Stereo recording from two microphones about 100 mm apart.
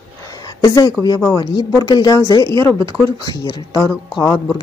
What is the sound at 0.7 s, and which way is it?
Speech, 35° left (ahead or behind).